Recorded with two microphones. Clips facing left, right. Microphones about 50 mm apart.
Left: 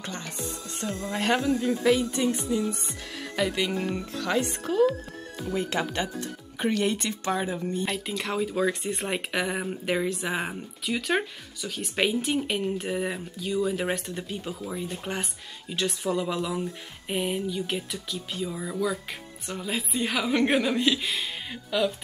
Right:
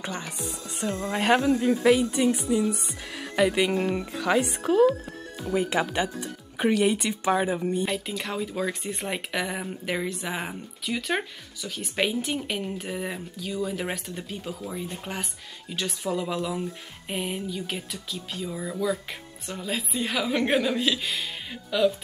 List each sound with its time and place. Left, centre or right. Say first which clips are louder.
0.0 s speech: right 2 dB; centre
7.9 s speech: even; centre